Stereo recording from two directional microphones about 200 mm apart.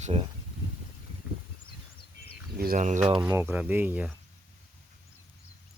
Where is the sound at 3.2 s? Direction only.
10° right (ahead or behind).